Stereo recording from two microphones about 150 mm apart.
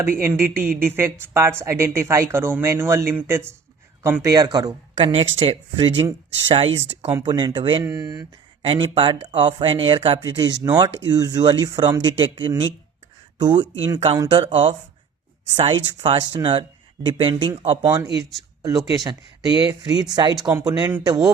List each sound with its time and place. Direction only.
0.2 s speech: 15° right (ahead or behind)
5.0 s speech: 40° right (ahead or behind)
7.9 s speech: 20° right (ahead or behind)
8.6 s speech: 35° right (ahead or behind)